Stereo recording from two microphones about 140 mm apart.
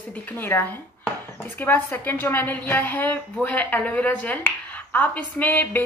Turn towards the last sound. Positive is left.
turn(degrees=15)  # may be behind; listen again after turning